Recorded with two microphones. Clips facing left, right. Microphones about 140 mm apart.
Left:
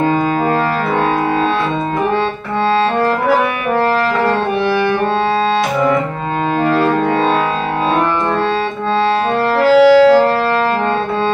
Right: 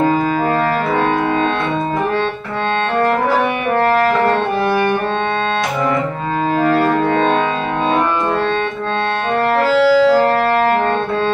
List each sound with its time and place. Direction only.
6.7 s music: centre (ahead or behind)
9.6 s music: centre (ahead or behind)